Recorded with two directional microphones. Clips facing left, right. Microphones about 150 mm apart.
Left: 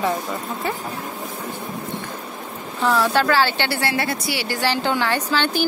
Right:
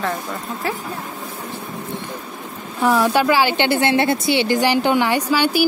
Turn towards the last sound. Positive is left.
turn(degrees=-10)  # may be behind; listen again after turning